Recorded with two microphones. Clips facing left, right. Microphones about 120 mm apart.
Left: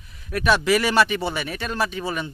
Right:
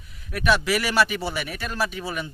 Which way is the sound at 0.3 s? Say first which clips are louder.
Left 3 dB; 5° right (ahead or behind).